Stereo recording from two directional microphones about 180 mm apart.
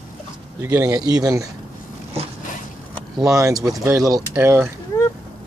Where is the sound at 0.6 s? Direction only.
15° right (ahead or behind).